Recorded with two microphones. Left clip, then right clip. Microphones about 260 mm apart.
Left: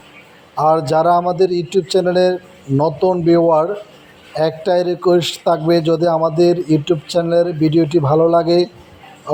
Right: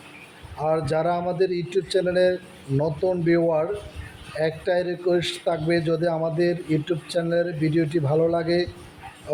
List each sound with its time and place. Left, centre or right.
0.5 s a man's voice: left